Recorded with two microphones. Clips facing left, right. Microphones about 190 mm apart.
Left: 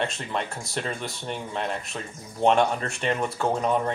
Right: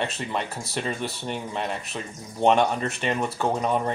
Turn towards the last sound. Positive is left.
turn(degrees=0)  # may be behind; listen again after turning